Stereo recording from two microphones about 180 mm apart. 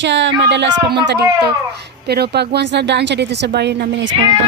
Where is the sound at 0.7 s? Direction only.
25° right (ahead or behind).